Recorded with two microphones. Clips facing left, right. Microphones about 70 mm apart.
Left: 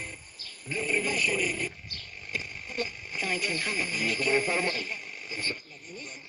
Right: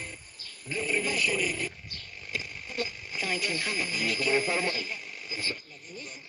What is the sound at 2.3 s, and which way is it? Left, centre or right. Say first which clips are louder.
Radio: even; centre.